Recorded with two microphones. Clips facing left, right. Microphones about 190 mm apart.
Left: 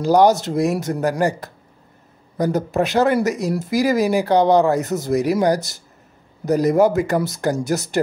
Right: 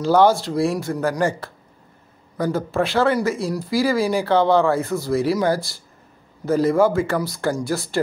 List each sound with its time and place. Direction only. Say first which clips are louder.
0.0 s speech: left 1 dB; 15° left (ahead or behind)